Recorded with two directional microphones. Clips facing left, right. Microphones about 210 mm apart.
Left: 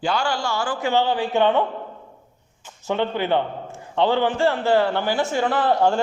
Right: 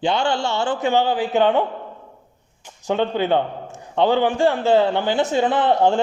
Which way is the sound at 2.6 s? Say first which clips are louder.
Right 2 dB; 15° right (ahead or behind).